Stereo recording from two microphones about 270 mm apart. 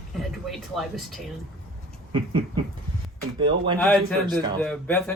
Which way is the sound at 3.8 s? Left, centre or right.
Centre.